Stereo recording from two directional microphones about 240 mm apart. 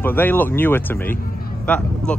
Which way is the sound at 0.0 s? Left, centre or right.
Centre.